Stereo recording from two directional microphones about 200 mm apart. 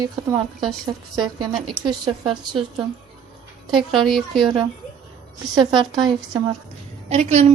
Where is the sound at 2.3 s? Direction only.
25° right (ahead or behind).